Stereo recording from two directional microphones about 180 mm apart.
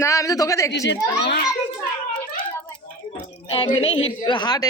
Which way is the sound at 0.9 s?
70° left (ahead or behind).